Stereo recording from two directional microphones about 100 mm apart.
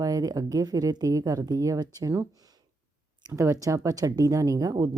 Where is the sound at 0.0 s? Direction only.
40° right (ahead or behind).